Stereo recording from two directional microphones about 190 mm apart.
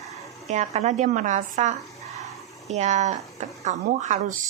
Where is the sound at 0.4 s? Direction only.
35° right (ahead or behind).